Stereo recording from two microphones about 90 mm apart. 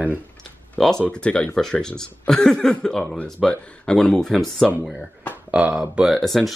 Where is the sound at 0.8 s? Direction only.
10° left (ahead or behind).